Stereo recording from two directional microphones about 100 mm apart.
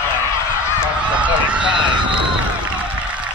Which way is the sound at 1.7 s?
50° right (ahead or behind).